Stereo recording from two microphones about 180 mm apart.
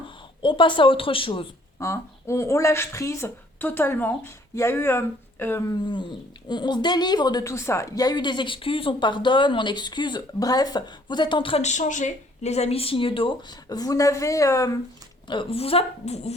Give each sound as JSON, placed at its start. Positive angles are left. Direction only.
{"t": 0.4, "sound": "speech", "side_deg": 25}
{"t": 1.8, "sound": "speech", "side_deg": 15}
{"t": 15.3, "sound": "a woman's voice", "side_deg": 30}